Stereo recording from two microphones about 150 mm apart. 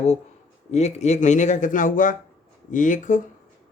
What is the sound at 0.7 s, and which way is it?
Speech, 50° left (ahead or behind).